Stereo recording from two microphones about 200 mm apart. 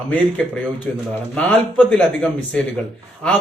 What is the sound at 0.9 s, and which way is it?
A man's voice, 5° left (ahead or behind).